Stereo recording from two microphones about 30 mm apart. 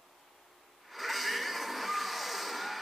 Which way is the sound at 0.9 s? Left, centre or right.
Centre.